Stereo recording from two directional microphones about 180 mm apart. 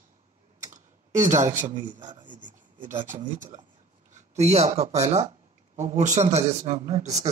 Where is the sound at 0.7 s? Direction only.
45° right (ahead or behind).